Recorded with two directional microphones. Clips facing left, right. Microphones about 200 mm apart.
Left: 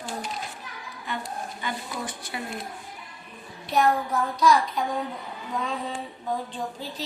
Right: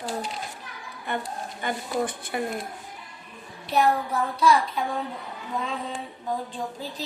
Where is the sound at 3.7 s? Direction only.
10° right (ahead or behind).